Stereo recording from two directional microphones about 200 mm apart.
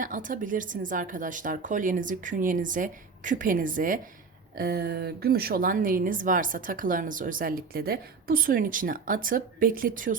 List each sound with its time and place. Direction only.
0.0 s speech: 40° right (ahead or behind)